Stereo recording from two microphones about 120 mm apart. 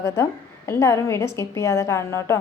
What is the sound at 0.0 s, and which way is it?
A woman's voice, 25° left (ahead or behind).